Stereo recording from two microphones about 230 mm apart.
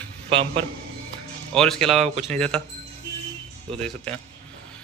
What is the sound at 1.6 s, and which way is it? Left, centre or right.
Speech, centre.